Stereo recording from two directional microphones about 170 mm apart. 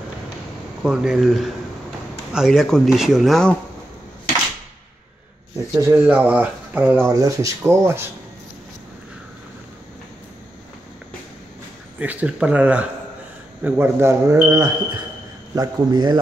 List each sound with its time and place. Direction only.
0.8 s speech: 5° right (ahead or behind)
5.8 s speech: 15° right (ahead or behind)
12.0 s speech: 10° right (ahead or behind); by 16.2 s 25° right (ahead or behind)